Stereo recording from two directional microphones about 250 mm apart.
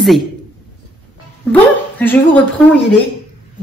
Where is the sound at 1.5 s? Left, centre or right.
Centre.